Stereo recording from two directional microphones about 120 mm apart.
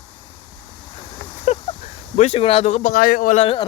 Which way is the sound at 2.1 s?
60° left (ahead or behind).